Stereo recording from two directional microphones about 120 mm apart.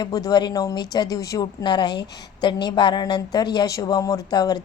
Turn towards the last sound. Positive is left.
turn(degrees=35)  # may be behind; listen again after turning